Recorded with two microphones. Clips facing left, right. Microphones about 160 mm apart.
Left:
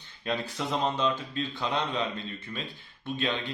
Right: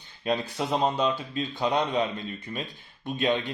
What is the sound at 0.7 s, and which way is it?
Speech, 15° right (ahead or behind).